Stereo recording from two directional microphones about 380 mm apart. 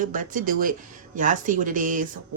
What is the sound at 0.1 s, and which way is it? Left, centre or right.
Speech, right.